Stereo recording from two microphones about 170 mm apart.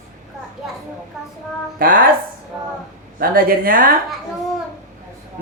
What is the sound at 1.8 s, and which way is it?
Speech, 60° right (ahead or behind).